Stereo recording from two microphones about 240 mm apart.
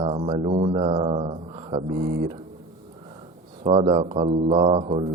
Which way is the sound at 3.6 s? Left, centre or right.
Right.